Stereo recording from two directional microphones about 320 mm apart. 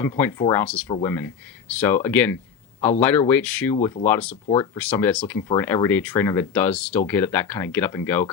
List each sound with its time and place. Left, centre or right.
0.0 s speech: centre
4.4 s speech: centre
4.8 s speech: centre